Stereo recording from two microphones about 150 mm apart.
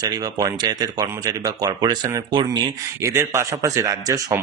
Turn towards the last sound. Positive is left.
turn(degrees=-20)  # may be behind; listen again after turning